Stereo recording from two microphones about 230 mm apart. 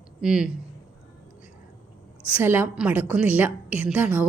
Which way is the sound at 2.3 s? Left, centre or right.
Centre.